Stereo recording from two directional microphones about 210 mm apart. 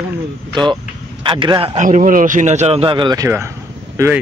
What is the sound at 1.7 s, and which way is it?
A man's voice, 35° right (ahead or behind).